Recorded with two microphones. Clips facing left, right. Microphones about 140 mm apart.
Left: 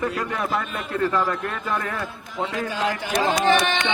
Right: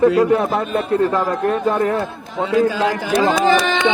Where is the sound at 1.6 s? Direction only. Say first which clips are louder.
Right 10 dB; 30° right (ahead or behind).